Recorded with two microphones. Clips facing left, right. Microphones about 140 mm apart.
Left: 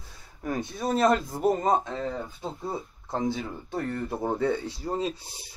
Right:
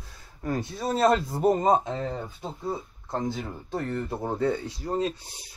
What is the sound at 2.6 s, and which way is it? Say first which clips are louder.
Speech: right 4 dB; centre (ahead or behind).